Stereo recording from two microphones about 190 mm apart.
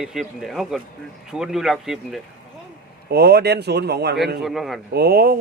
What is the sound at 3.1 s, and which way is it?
Speech, 60° right (ahead or behind).